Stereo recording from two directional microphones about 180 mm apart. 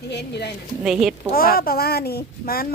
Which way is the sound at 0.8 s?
Centre (ahead or behind).